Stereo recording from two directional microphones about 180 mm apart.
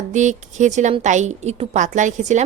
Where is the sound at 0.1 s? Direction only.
40° right (ahead or behind).